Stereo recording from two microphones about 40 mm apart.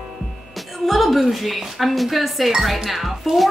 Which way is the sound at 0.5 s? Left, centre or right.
Centre.